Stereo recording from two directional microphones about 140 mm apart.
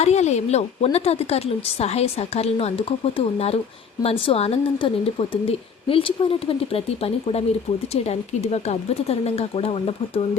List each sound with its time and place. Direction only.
0.0 s a woman's voice: 55° left (ahead or behind)